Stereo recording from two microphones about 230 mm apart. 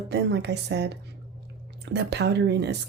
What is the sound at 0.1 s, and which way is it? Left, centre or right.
Speech, right.